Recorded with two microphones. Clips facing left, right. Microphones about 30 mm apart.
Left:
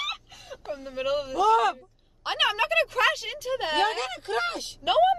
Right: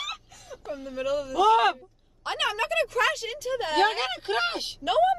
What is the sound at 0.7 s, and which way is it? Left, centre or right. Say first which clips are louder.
Speech: even; centre.